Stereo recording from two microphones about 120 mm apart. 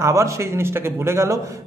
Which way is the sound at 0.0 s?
25° right (ahead or behind).